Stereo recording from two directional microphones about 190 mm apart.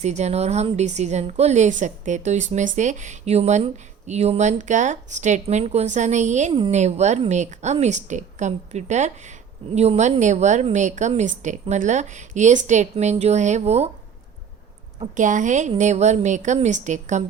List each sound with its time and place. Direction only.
0.0 s a woman's voice: 35° right (ahead or behind)
14.9 s a woman's voice: 40° right (ahead or behind)